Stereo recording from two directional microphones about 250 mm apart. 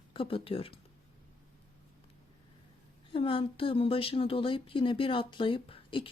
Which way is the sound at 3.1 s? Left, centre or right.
Left.